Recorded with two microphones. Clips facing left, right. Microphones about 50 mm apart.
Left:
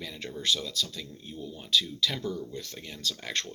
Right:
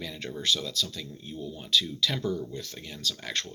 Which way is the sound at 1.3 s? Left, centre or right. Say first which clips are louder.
Right 2 dB; centre.